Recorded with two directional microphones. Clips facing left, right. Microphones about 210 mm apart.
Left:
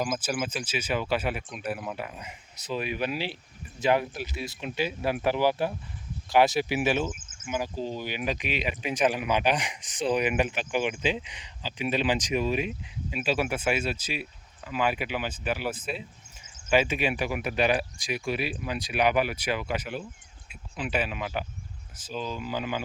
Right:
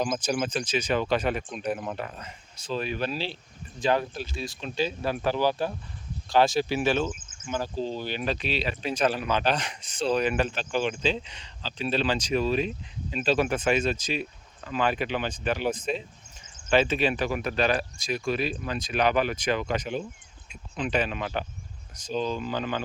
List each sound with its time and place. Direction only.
0.0 s speech: 5° left (ahead or behind)